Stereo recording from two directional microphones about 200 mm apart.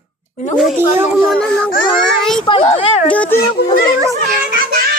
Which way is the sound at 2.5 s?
25° left (ahead or behind).